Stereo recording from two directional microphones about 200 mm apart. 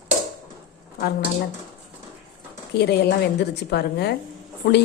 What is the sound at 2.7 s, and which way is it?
A woman's voice, 55° left (ahead or behind).